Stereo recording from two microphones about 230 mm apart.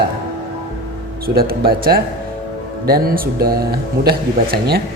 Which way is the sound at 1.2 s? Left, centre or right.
Right.